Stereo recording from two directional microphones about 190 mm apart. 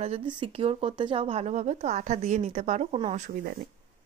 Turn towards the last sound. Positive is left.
turn(degrees=-50)  # may be behind; listen again after turning